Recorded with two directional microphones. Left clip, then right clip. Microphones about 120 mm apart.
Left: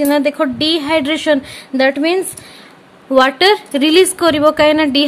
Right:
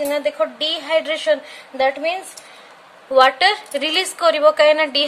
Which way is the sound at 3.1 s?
40° left (ahead or behind).